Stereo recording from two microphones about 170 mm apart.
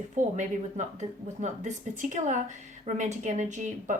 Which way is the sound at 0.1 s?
45° right (ahead or behind).